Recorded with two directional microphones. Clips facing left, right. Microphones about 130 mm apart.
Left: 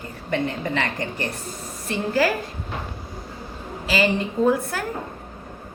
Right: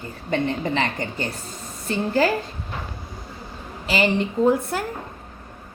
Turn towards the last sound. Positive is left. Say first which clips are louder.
# right 1 dB
turn(degrees=-25)  # may be behind; listen again after turning